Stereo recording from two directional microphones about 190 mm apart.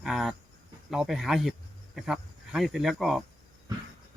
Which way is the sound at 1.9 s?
Centre (ahead or behind).